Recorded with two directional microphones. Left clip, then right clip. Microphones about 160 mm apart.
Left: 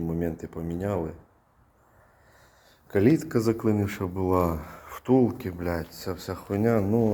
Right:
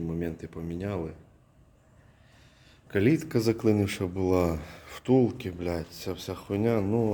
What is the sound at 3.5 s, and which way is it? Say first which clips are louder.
Speech: right 1 dB; 40° right (ahead or behind).